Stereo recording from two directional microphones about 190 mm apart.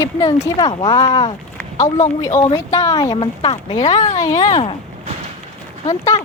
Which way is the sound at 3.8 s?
40° left (ahead or behind).